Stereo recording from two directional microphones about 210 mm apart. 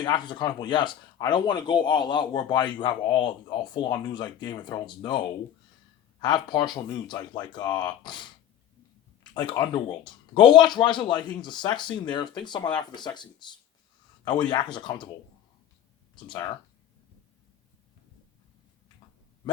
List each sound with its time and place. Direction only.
0.0 s speech: 20° left (ahead or behind)
9.3 s speech: 20° left (ahead or behind)
14.3 s speech: 20° left (ahead or behind)